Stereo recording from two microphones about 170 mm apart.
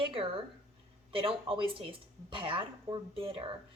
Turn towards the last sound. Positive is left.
turn(degrees=-30)  # may be behind; listen again after turning